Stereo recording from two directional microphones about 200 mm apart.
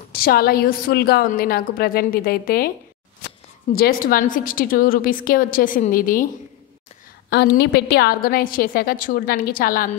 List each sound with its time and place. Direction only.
0.1 s a woman's voice: 50° left (ahead or behind)
3.7 s a woman's voice: 45° left (ahead or behind)
7.2 s a woman's voice: 55° left (ahead or behind)